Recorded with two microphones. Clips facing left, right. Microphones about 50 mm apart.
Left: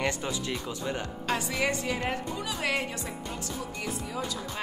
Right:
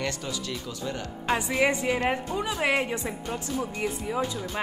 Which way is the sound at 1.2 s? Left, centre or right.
Right.